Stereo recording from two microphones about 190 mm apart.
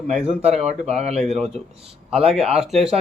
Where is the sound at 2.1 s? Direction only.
Centre (ahead or behind).